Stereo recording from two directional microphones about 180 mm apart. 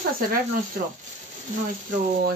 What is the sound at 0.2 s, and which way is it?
Speech, 55° right (ahead or behind).